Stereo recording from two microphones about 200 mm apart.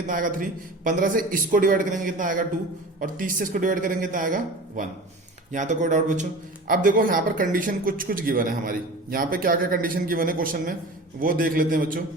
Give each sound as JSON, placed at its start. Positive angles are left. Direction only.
{"t": 0.1, "sound": "a man's voice", "side_deg": -45}
{"t": 5.5, "sound": "a man's voice", "side_deg": -40}